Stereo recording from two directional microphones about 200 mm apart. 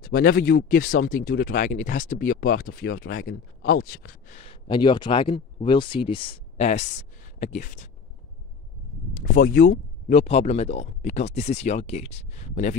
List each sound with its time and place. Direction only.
0.0 s speech: 45° left (ahead or behind)
4.4 s speech: 25° left (ahead or behind)
9.1 s speech: 45° left (ahead or behind)